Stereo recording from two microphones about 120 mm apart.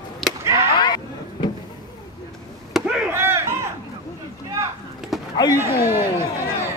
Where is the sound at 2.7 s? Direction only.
5° right (ahead or behind).